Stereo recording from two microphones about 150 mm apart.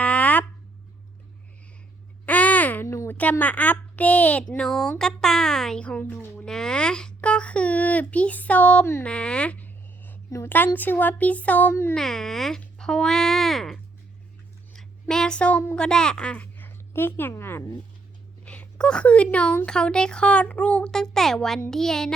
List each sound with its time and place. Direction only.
0.0 s a sound: 10° left (ahead or behind)
2.2 s speech: 10° left (ahead or behind)
11.9 s a woman's voice: 5° left (ahead or behind)